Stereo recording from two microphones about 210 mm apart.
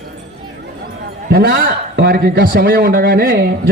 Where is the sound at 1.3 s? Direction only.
50° right (ahead or behind).